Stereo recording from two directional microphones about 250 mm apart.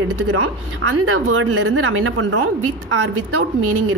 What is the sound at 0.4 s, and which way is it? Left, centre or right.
Speech, right.